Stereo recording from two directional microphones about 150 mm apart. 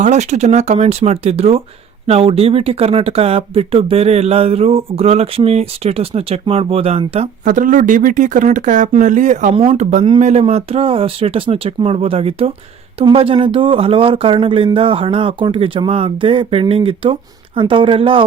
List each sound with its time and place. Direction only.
0.0 s speech: 50° right (ahead or behind)
7.4 s speech: 60° right (ahead or behind)
9.6 s speech: 40° right (ahead or behind)